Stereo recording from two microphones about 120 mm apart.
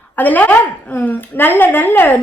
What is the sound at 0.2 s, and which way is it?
A woman's voice, 15° left (ahead or behind).